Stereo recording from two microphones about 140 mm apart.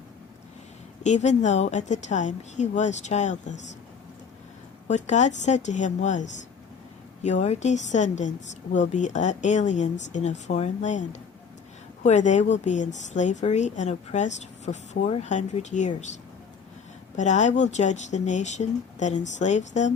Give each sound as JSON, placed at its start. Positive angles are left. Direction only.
{"t": 1.0, "sound": "a woman's voice", "side_deg": 55}
{"t": 4.9, "sound": "a woman's voice", "side_deg": 55}
{"t": 17.2, "sound": "a woman's voice", "side_deg": 60}